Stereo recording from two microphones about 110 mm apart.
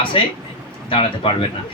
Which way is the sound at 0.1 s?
50° left (ahead or behind).